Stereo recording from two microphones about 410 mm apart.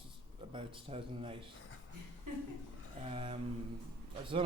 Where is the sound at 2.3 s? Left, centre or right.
Right.